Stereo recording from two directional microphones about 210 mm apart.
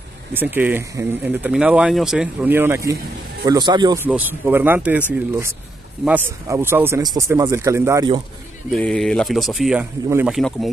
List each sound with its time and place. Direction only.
0.3 s speech: 10° right (ahead or behind)
4.0 s speech: 10° right (ahead or behind)
6.0 s speech: 10° right (ahead or behind)
8.7 s speech: 5° left (ahead or behind)